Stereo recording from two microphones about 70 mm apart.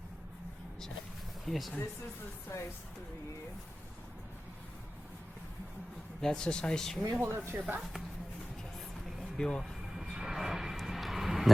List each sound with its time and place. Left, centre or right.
1.5 s speech: centre
2.5 s speech: left
6.2 s speech: centre
7.2 s speech: right
9.4 s speech: centre
10.0 s vehicle: centre